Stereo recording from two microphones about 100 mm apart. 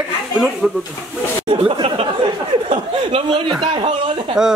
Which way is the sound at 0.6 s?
5° right (ahead or behind).